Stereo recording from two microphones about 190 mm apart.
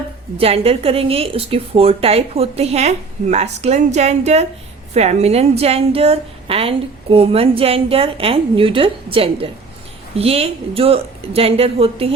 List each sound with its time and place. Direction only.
0.3 s a woman's voice: 30° right (ahead or behind)